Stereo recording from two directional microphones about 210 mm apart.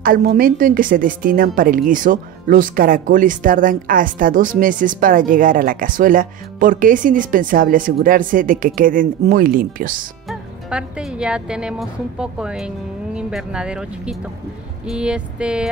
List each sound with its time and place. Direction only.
0.0 s a woman's voice: 45° right (ahead or behind)
10.2 s speech: 5° right (ahead or behind)
14.9 s a sound: 5° right (ahead or behind)